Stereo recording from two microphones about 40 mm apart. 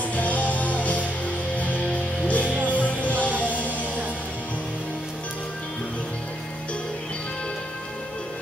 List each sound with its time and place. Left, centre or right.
0.1 s music: left